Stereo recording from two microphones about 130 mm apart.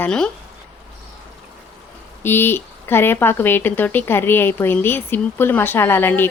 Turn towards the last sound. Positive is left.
turn(degrees=15)  # may be behind; listen again after turning